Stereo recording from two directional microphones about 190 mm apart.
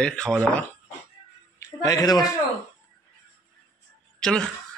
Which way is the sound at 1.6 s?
15° left (ahead or behind).